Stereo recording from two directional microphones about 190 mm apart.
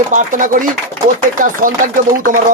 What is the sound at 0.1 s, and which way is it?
Speech, 45° right (ahead or behind).